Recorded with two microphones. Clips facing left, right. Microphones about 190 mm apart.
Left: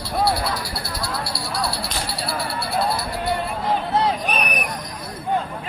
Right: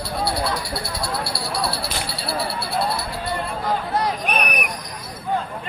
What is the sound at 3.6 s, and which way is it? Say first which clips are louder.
Chatter: left 2 dB; 25° left (ahead or behind).